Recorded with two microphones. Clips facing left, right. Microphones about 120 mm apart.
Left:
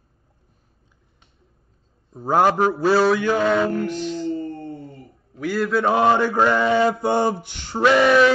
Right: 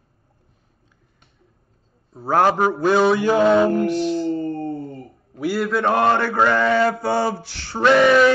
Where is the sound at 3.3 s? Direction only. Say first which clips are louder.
Right 4 dB; 25° right (ahead or behind).